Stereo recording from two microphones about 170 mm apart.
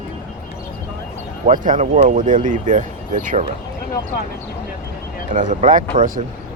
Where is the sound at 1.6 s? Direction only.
50° right (ahead or behind).